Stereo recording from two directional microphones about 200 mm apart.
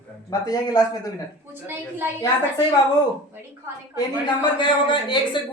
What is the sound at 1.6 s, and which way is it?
Speech, 10° right (ahead or behind).